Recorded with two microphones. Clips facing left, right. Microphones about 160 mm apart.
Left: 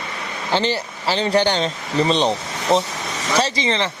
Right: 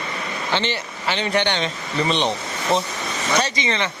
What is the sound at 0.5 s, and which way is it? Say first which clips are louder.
Speech: left 5 dB; 40° left (ahead or behind).